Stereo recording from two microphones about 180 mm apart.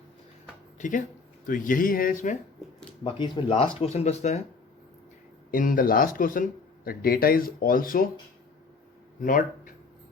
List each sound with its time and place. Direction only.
0.8 s speech: 45° left (ahead or behind)
3.0 s speech: 25° left (ahead or behind)
5.5 s speech: 50° left (ahead or behind)
9.2 s speech: 50° left (ahead or behind)